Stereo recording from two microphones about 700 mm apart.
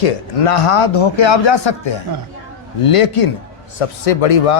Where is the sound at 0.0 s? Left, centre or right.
Left.